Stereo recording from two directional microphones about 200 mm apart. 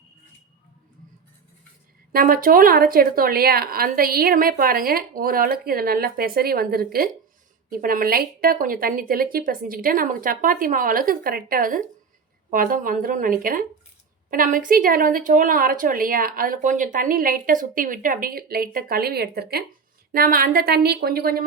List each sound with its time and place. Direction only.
2.1 s speech: 45° right (ahead or behind)